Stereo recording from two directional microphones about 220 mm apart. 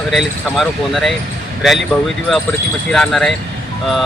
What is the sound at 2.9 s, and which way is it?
Speech, centre (ahead or behind).